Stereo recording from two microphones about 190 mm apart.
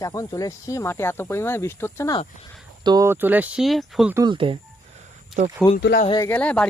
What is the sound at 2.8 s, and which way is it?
Speech, 20° right (ahead or behind).